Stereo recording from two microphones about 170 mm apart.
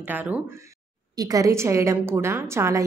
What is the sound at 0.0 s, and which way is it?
A woman's voice, 10° right (ahead or behind).